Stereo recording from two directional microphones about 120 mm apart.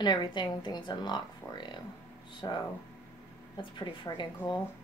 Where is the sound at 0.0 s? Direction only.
40° left (ahead or behind).